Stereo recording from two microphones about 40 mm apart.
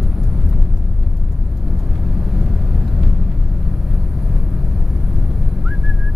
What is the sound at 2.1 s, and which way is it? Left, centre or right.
Vehicle, centre.